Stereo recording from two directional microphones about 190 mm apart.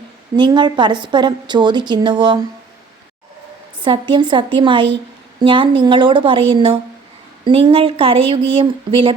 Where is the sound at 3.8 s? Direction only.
25° right (ahead or behind).